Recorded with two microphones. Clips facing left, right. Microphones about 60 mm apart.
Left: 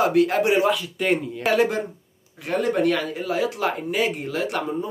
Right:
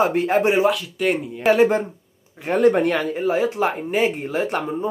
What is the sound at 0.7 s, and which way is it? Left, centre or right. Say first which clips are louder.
Speech: right 1 dB; centre.